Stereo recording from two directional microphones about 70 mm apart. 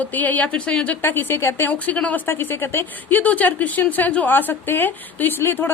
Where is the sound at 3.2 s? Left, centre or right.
Left.